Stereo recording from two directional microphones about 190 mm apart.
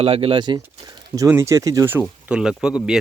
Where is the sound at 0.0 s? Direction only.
30° right (ahead or behind).